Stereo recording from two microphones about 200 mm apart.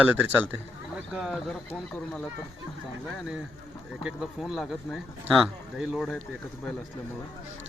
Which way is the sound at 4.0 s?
Centre (ahead or behind).